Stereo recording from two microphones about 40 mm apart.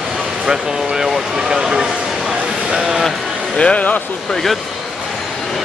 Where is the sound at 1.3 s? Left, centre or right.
Centre.